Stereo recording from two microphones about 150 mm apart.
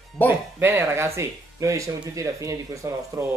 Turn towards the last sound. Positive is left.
turn(degrees=-15)  # may be behind; listen again after turning